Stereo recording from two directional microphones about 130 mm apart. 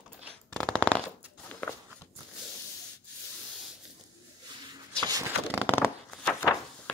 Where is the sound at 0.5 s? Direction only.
5° left (ahead or behind).